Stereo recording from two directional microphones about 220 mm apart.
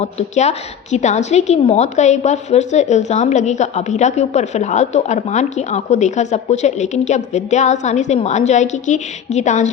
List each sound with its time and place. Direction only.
0.0 s a woman's voice: 30° left (ahead or behind)